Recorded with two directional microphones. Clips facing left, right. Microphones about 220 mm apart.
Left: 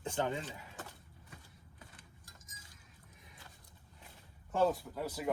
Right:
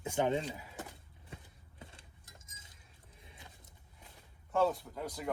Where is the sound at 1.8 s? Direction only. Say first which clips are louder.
Right 5 dB; 25° right (ahead or behind).